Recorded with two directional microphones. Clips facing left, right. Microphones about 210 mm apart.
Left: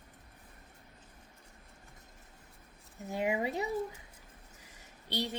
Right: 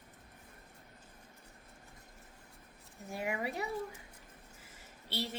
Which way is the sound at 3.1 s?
20° left (ahead or behind).